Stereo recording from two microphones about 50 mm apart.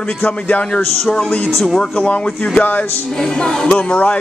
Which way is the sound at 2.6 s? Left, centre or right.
Left.